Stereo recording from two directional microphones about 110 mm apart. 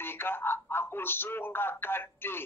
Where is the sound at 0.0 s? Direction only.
20° left (ahead or behind).